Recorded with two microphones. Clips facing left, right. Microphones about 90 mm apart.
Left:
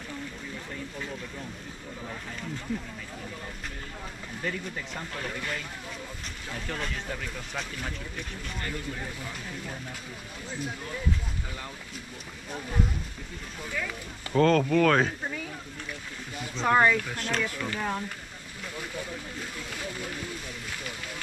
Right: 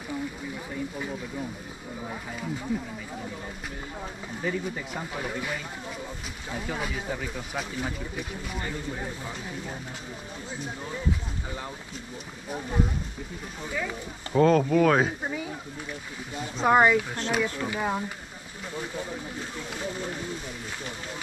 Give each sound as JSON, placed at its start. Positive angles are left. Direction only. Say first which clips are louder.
{"t": 2.0, "sound": "speech", "louder": "right 4 dB", "side_deg": -15}
{"t": 4.4, "sound": "speech", "louder": "right 4 dB", "side_deg": -10}
{"t": 12.4, "sound": "speech", "louder": "right 3 dB", "side_deg": -10}